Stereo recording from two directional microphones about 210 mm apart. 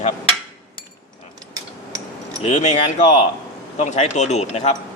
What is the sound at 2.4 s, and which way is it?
Speech, 35° left (ahead or behind).